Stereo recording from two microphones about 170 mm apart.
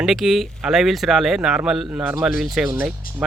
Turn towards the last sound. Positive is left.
turn(degrees=55)  # may be behind; listen again after turning